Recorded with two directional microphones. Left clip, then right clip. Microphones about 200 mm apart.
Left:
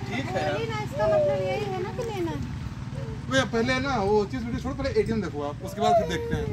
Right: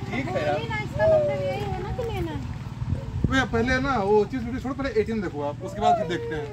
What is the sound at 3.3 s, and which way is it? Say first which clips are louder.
Speech: right 1 dB; 10° left (ahead or behind).